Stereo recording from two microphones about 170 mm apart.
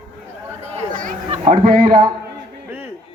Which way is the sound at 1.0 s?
55° right (ahead or behind).